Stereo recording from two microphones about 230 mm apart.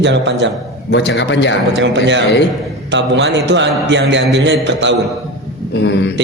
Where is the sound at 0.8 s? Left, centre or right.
Left.